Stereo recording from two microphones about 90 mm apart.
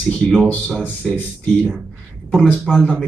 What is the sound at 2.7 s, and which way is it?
Speech, 5° right (ahead or behind).